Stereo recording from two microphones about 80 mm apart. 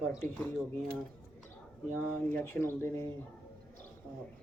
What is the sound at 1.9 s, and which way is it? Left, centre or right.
Speech, left.